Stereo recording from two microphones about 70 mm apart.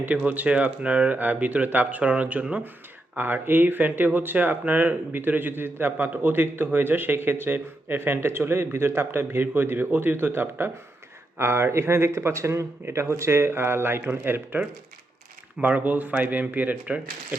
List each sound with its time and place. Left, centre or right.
0.3 s speech: centre
15.6 s speech: right